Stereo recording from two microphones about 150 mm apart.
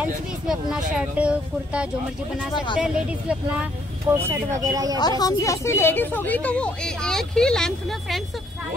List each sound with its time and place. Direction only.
0.5 s speech: 5° right (ahead or behind)
2.5 s speech: 30° left (ahead or behind)
4.1 s speech: 20° right (ahead or behind)
4.9 s a woman's voice: 25° left (ahead or behind); by 8.2 s 5° left (ahead or behind)